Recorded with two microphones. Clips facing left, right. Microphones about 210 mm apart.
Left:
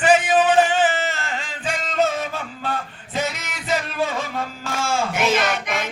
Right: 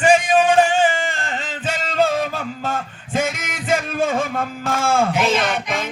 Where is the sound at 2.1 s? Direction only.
40° right (ahead or behind).